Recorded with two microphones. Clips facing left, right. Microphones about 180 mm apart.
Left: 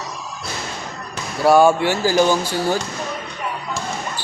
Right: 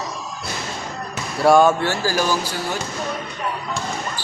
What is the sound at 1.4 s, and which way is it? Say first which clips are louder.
Speech: left 1 dB; 5° left (ahead or behind).